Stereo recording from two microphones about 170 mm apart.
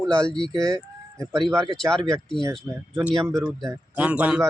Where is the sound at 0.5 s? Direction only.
20° right (ahead or behind).